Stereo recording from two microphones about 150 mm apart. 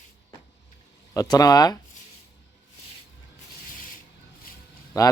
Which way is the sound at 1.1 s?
25° left (ahead or behind).